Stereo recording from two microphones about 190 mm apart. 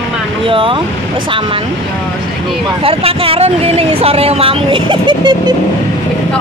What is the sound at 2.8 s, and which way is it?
Speech, 30° right (ahead or behind).